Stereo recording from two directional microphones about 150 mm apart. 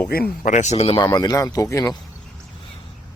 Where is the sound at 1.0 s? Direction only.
25° left (ahead or behind).